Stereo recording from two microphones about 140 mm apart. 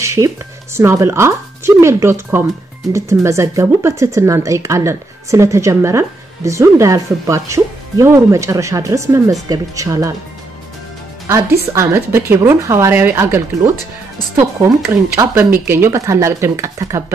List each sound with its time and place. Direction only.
0.0 s a sound: 20° right (ahead or behind)
0.7 s speech: 20° right (ahead or behind)
11.7 s speech: 20° right (ahead or behind)